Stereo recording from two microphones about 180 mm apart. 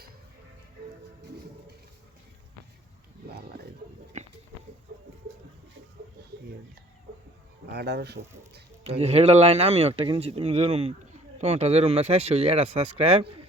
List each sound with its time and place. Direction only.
7.7 s speech: 65° right (ahead or behind)
8.8 s speech: 35° right (ahead or behind)